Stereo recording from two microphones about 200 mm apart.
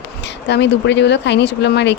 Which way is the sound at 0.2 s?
60° left (ahead or behind).